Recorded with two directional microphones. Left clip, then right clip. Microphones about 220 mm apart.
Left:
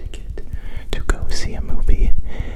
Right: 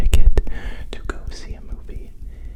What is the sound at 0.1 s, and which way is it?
Whispering, 50° right (ahead or behind).